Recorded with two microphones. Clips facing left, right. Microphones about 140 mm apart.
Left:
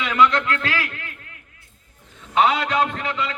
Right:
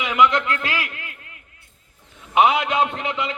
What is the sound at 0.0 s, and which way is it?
Speech, 15° right (ahead or behind).